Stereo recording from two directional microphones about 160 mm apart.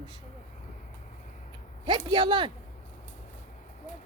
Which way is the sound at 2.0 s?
30° right (ahead or behind).